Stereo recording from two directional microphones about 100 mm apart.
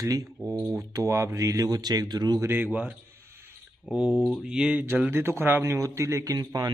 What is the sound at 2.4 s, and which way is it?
Speech, 20° right (ahead or behind).